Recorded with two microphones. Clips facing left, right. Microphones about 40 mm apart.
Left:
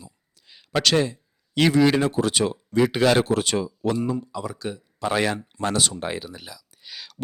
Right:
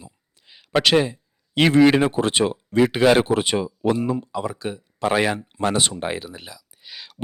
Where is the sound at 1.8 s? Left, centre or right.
Right.